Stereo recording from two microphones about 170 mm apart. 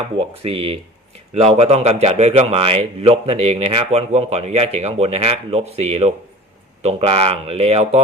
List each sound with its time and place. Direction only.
0.4 s speech: 35° right (ahead or behind)